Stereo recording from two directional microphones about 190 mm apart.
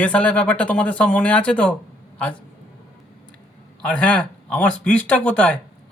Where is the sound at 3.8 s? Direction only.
5° left (ahead or behind).